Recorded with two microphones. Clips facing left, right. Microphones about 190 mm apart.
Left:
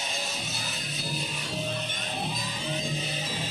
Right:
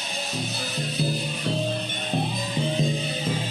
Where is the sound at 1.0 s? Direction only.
60° right (ahead or behind).